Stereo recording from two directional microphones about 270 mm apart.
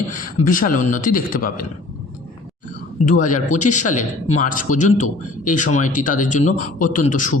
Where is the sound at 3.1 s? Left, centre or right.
Left.